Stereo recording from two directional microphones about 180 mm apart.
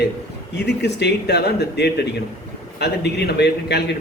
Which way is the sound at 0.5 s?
70° left (ahead or behind).